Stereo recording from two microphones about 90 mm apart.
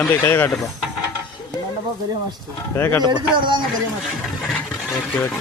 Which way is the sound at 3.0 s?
60° right (ahead or behind).